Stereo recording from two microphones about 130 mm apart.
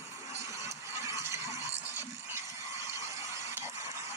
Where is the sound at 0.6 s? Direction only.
20° right (ahead or behind).